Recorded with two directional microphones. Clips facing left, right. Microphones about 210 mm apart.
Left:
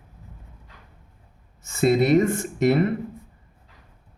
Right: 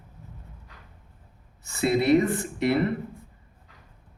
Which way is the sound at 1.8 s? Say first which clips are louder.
Left 3 dB; 45° left (ahead or behind).